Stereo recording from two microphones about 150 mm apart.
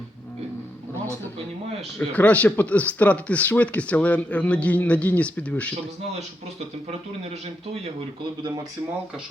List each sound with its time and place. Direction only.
2.0 s speech: 10° left (ahead or behind)
7.3 s a man's voice: 45° right (ahead or behind)